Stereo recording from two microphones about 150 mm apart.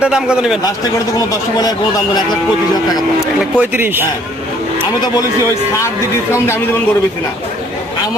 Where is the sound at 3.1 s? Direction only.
10° right (ahead or behind).